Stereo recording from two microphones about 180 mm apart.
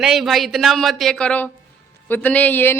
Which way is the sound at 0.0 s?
Centre (ahead or behind).